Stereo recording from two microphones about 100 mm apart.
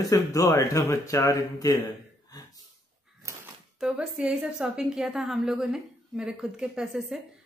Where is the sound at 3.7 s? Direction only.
5° right (ahead or behind).